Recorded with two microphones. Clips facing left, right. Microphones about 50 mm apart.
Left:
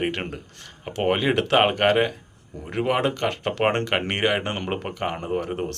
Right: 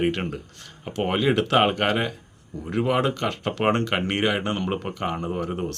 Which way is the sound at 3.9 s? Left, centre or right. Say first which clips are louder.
Even; left.